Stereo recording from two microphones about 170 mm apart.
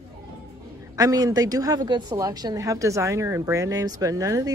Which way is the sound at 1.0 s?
20° right (ahead or behind).